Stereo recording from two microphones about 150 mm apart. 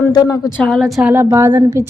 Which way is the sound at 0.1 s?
25° left (ahead or behind).